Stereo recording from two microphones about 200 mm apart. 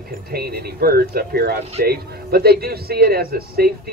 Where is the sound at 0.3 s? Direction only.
50° right (ahead or behind).